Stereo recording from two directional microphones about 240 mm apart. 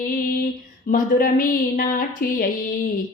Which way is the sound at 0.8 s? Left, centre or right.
Left.